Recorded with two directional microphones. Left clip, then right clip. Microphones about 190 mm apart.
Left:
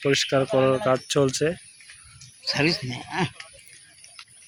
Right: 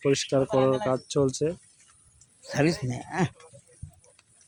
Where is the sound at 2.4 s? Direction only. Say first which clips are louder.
Left 3 dB; 60° right (ahead or behind).